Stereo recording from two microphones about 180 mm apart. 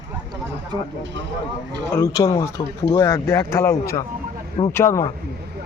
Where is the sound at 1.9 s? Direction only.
15° left (ahead or behind).